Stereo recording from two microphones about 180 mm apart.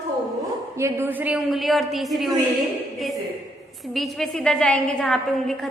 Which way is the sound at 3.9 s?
Centre (ahead or behind).